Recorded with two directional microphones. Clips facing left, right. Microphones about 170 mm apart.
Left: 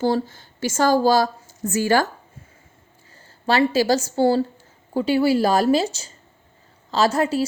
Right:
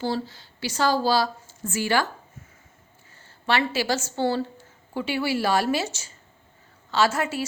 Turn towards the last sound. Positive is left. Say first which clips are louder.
# left 4 dB
turn(degrees=35)  # may be behind; listen again after turning